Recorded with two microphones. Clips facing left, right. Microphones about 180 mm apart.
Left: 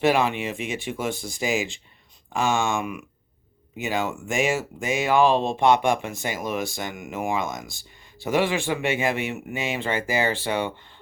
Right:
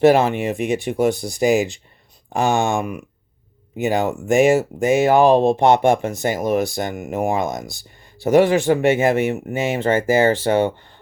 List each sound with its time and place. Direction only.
0.0 s speech: 45° right (ahead or behind)